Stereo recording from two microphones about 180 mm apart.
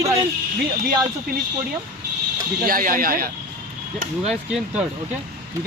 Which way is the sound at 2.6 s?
50° right (ahead or behind).